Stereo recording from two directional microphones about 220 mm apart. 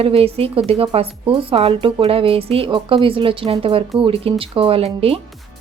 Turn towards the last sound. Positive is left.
turn(degrees=-25)  # may be behind; listen again after turning